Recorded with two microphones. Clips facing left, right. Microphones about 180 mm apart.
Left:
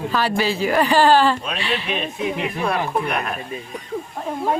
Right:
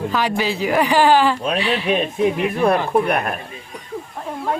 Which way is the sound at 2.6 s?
55° right (ahead or behind).